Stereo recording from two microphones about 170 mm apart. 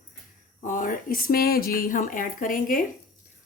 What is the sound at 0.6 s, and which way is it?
Speech, 50° left (ahead or behind).